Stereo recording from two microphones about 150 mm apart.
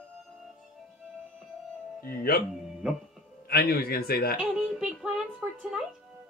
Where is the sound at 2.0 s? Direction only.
90° left.